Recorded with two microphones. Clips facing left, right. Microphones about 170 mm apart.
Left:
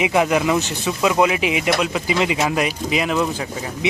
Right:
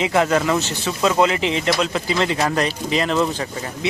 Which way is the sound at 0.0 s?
15° left (ahead or behind).